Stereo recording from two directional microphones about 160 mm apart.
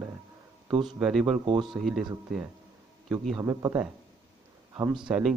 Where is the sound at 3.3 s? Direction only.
20° right (ahead or behind).